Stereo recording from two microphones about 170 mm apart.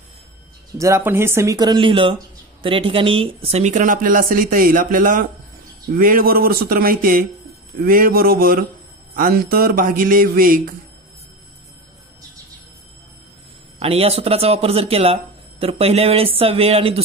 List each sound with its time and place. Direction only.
0.7 s speech: 15° right (ahead or behind); by 10.6 s 55° right (ahead or behind)
13.7 s speech: 35° right (ahead or behind)